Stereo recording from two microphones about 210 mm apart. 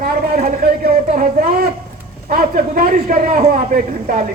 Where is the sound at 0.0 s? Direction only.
45° right (ahead or behind).